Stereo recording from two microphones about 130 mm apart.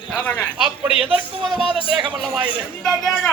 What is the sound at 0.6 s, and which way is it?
Speech, 5° right (ahead or behind).